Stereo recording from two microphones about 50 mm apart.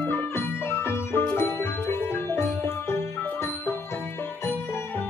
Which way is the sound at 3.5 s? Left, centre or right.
Left.